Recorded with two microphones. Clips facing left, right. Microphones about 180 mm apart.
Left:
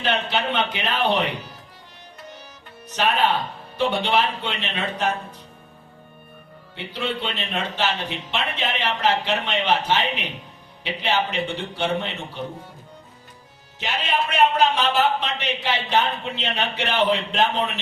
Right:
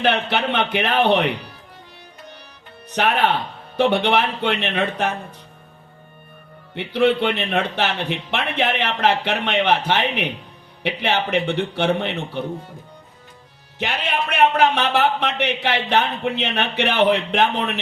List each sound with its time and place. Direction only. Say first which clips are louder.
0.0 s a man's voice: right 4 dB; 60° right (ahead or behind)
2.9 s a man's voice: right 2 dB; 60° right (ahead or behind)
6.7 s a man's voice: right 10 dB; 60° right (ahead or behind)
13.7 s a man's voice: right 1 dB; 60° right (ahead or behind)